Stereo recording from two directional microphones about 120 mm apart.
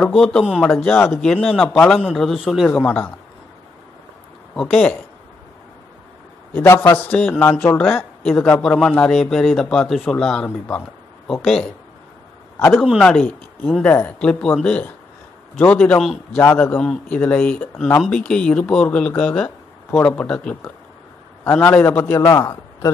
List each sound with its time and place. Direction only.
0.1 s a man's voice: 5° left (ahead or behind)
0.6 s speech: 15° left (ahead or behind)
1.1 s a man's voice: centre (ahead or behind)
2.7 s speech: 15° left (ahead or behind)
4.6 s speech: 10° left (ahead or behind)
6.5 s a man's voice: 20° left (ahead or behind); by 11.5 s centre (ahead or behind)
13.0 s speech: 5° left (ahead or behind)
16.0 s a man's voice: centre (ahead or behind)
16.4 s a man's voice: 20° left (ahead or behind)
16.7 s speech: 5° left (ahead or behind)
21.5 s a man's voice: 20° left (ahead or behind)
22.3 s a man's voice: 25° left (ahead or behind)